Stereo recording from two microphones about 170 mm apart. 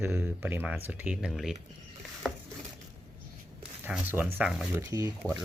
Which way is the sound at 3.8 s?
10° right (ahead or behind).